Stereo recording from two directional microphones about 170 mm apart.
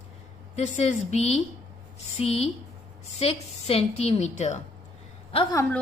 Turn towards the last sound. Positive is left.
turn(degrees=30)  # may be behind; listen again after turning